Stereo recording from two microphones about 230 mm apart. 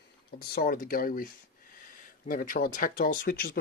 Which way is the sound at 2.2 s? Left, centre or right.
Left.